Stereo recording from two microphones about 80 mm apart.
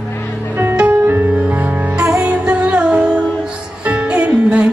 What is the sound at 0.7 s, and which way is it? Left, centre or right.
Music, right.